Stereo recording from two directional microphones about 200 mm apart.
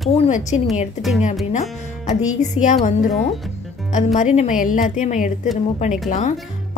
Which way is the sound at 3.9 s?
35° left (ahead or behind).